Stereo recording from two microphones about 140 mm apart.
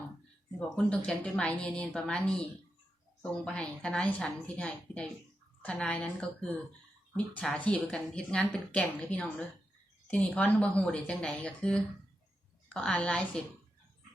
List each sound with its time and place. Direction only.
0.6 s a woman's voice: 10° left (ahead or behind)